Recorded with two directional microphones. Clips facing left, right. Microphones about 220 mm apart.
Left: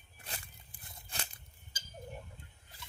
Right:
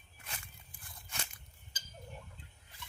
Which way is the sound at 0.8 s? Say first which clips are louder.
Left 1 dB; 25° left (ahead or behind).